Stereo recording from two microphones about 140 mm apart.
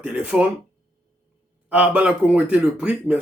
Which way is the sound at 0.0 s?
10° right (ahead or behind).